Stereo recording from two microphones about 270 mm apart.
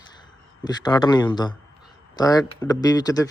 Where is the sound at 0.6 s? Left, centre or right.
Centre.